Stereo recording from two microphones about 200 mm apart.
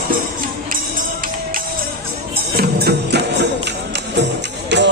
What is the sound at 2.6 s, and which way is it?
Music, 55° right (ahead or behind).